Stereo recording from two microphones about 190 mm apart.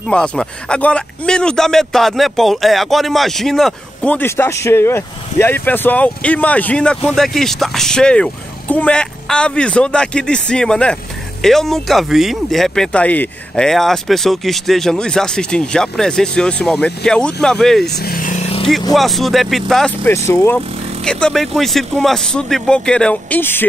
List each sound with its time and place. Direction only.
0.1 s speech: 5° left (ahead or behind)
17.9 s vehicle: 50° left (ahead or behind); by 18.7 s 30° left (ahead or behind)
18.9 s speech: centre (ahead or behind)
20.2 s speech: 15° left (ahead or behind)